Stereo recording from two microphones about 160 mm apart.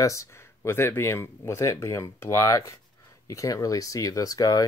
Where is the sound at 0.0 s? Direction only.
20° left (ahead or behind).